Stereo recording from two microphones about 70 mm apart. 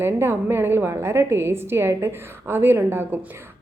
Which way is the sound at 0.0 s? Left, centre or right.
Right.